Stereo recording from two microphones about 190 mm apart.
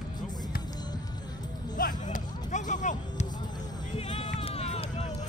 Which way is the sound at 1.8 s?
45° left (ahead or behind).